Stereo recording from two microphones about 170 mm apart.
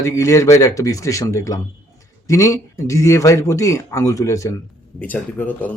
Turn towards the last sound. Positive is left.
turn(degrees=10)  # may be behind; listen again after turning